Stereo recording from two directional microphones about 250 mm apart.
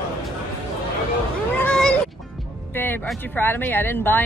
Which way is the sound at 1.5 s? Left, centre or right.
Centre.